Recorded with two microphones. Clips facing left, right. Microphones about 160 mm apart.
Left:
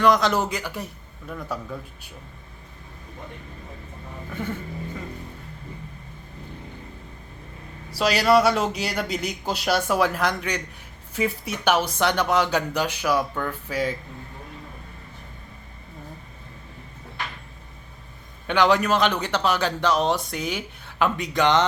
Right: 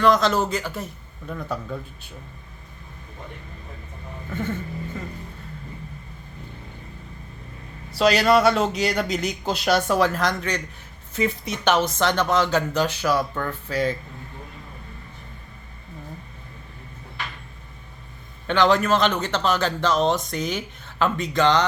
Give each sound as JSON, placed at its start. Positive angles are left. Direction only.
{"t": 0.0, "sound": "speech", "side_deg": 15}
{"t": 7.9, "sound": "speech", "side_deg": 10}
{"t": 18.4, "sound": "speech", "side_deg": 10}